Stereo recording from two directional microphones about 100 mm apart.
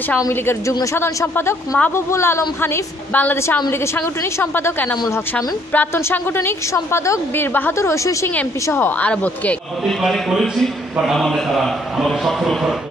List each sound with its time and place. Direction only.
0.3 s a woman's voice: 25° left (ahead or behind)
9.1 s a man's voice: 10° left (ahead or behind)
10.0 s a man's voice: centre (ahead or behind)